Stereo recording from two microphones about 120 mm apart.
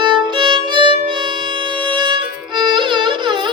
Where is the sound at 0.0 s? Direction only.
40° right (ahead or behind).